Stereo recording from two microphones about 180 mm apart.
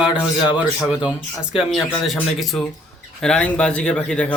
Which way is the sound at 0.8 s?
20° left (ahead or behind).